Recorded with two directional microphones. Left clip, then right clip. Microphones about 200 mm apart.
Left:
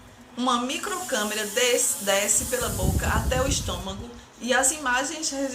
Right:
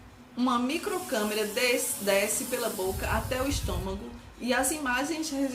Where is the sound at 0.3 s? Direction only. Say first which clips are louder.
Left 3 dB; 15° right (ahead or behind).